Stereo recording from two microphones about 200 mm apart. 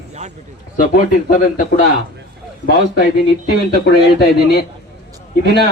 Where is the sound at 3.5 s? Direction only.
50° left (ahead or behind).